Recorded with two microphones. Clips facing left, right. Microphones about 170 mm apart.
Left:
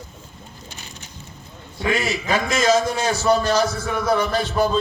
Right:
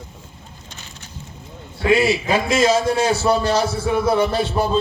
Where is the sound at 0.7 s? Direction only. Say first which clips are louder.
Right 1 dB; 15° left (ahead or behind).